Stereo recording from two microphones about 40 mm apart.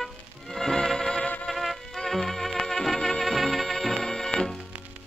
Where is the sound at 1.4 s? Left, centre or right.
Centre.